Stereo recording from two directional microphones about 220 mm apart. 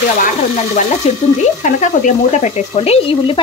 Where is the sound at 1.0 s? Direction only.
30° left (ahead or behind).